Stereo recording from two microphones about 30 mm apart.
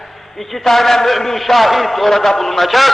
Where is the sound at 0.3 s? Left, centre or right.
Centre.